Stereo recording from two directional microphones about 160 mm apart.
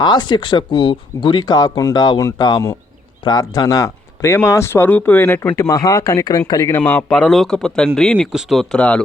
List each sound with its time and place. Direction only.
0.0 s a man's voice: 25° left (ahead or behind); by 9.0 s 5° left (ahead or behind)